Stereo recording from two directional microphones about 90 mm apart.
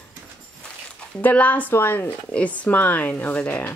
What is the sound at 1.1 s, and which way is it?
Speech, 15° left (ahead or behind).